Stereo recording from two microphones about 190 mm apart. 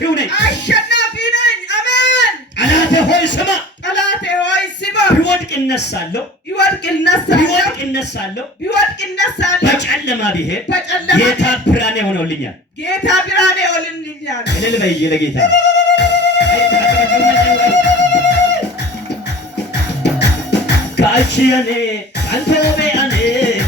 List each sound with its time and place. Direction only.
0.0 s a sound: 65° left (ahead or behind)
6.6 s speech: 65° left (ahead or behind)
14.3 s music: 65° left (ahead or behind)
19.5 s music: 65° left (ahead or behind)